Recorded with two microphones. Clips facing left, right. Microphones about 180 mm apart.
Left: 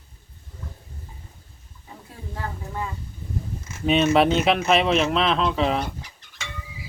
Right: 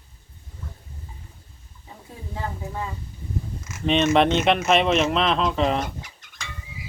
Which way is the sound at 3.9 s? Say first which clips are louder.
Even; 5° left (ahead or behind).